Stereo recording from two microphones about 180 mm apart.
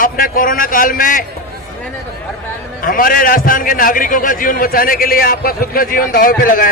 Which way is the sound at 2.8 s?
50° left (ahead or behind).